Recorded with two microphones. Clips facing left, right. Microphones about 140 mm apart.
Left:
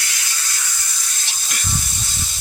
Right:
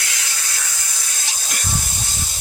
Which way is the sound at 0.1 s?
75° right (ahead or behind).